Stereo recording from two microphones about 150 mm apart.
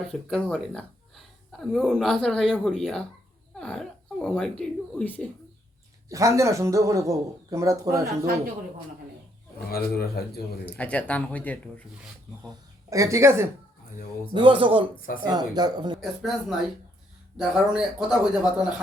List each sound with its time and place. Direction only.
0.1 s a woman's voice: 5° left (ahead or behind)
6.1 s speech: 20° right (ahead or behind)
9.6 s speech: 85° left
10.7 s speech: 10° left (ahead or behind)
12.9 s speech: 20° right (ahead or behind)
14.3 s a man's voice: 35° right (ahead or behind)
16.0 s a woman's voice: centre (ahead or behind)